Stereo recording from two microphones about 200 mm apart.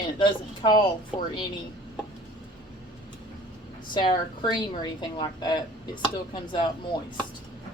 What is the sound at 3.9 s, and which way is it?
Speech, 25° left (ahead or behind).